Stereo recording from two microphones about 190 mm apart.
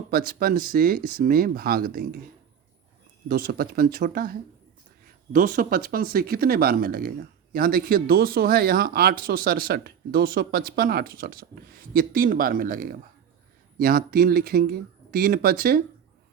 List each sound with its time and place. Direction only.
0.1 s speech: 50° right (ahead or behind)
3.2 s speech: 50° right (ahead or behind)